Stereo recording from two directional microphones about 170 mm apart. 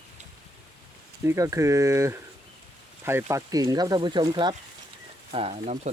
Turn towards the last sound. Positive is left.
turn(degrees=-40)  # may be behind; listen again after turning